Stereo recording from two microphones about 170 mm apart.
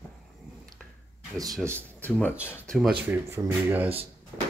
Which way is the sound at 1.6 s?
10° left (ahead or behind).